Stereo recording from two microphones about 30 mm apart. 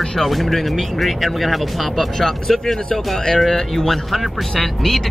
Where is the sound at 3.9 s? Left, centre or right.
Centre.